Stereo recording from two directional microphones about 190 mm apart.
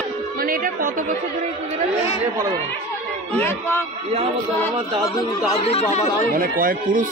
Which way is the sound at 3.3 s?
10° left (ahead or behind).